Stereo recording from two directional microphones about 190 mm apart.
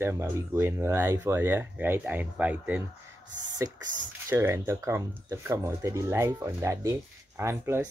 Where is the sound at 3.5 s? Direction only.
20° right (ahead or behind).